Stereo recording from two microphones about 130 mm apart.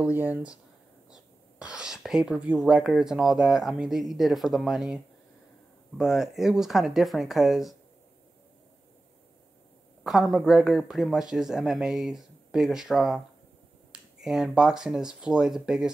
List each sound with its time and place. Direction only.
0.0 s speech: 10° right (ahead or behind)
1.1 s whispering: 5° right (ahead or behind)
2.7 s speech: 5° right (ahead or behind)
10.0 s speech: centre (ahead or behind)